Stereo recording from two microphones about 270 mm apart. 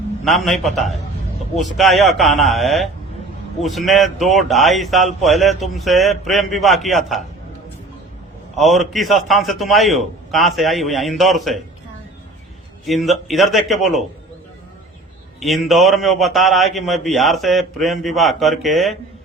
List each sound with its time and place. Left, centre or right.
0.3 s a man's voice: centre
8.5 s a man's voice: centre
12.8 s a man's voice: centre
15.4 s a man's voice: centre